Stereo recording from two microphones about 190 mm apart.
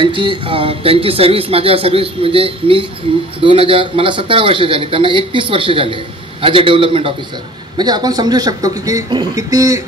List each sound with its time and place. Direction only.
0.0 s speech: 25° right (ahead or behind)